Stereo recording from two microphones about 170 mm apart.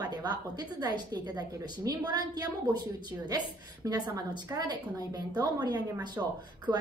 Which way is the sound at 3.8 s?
25° right (ahead or behind).